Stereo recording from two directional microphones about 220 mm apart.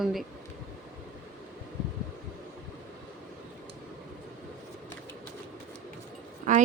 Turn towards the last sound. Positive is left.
turn(degrees=-35)  # may be behind; listen again after turning